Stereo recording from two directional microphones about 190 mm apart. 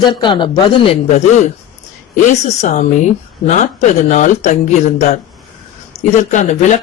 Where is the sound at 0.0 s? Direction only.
25° left (ahead or behind).